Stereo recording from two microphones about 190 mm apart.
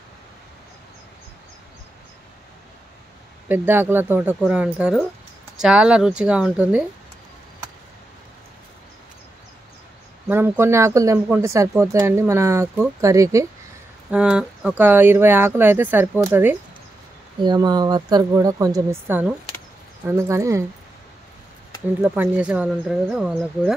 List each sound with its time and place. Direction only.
3.4 s speech: 10° right (ahead or behind)
10.2 s speech: 10° right (ahead or behind)
14.1 s speech: 5° right (ahead or behind)
22.0 s speech: 10° right (ahead or behind)